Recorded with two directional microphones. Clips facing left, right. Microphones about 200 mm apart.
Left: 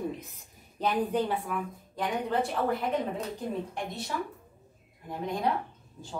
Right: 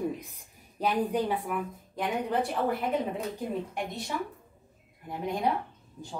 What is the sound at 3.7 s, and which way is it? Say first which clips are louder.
Speech: right 1 dB; 20° right (ahead or behind).